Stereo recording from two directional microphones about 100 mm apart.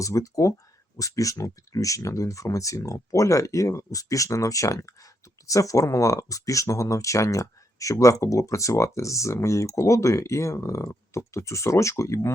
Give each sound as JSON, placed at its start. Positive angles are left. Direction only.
{"t": 0.0, "sound": "speech", "side_deg": 35}